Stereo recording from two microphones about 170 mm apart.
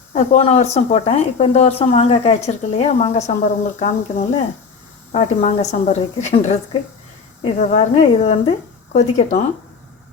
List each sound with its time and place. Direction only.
0.1 s a woman's voice: 40° left (ahead or behind)
7.6 s speech: 40° left (ahead or behind)